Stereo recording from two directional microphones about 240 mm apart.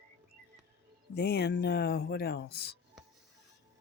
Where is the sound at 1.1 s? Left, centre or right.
Left.